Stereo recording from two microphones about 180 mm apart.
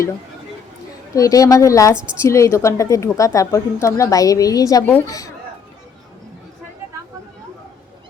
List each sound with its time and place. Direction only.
1.1 s a woman's voice: 20° left (ahead or behind)